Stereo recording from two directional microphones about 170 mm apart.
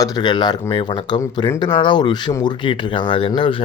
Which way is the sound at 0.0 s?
25° left (ahead or behind).